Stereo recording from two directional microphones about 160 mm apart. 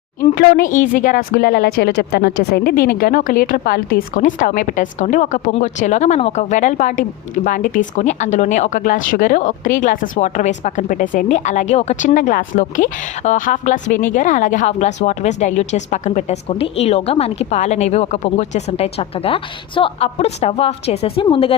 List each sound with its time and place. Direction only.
0.3 s a woman's voice: 65° left (ahead or behind); by 21.5 s 35° left (ahead or behind)